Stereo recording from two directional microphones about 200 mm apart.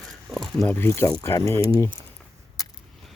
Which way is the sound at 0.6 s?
10° left (ahead or behind).